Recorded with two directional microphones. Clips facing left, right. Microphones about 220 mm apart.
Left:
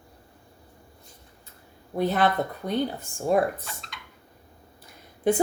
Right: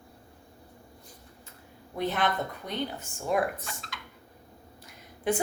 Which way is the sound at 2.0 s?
40° left (ahead or behind).